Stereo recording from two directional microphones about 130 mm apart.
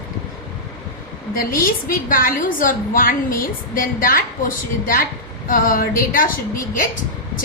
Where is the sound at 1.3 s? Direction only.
90° left.